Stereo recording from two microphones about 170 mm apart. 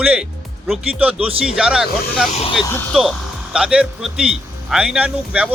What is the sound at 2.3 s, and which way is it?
Speech, 40° left (ahead or behind).